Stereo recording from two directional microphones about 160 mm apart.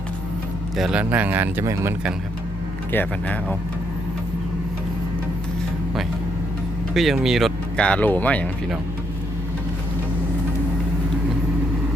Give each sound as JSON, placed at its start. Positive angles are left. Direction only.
{"t": 0.8, "sound": "speech", "side_deg": -5}
{"t": 2.9, "sound": "speech", "side_deg": 10}
{"t": 6.9, "sound": "speech", "side_deg": 0}